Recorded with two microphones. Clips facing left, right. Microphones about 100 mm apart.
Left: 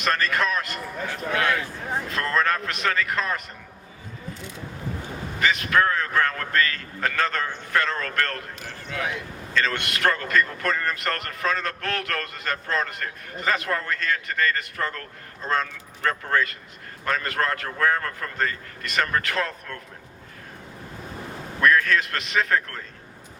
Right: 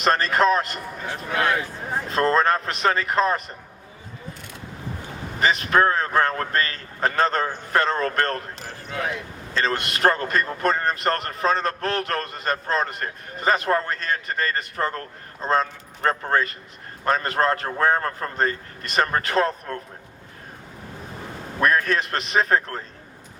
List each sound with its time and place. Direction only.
0.0 s a man's voice: 30° right (ahead or behind)
5.4 s a man's voice: 30° right (ahead or behind)
21.6 s a man's voice: 30° right (ahead or behind)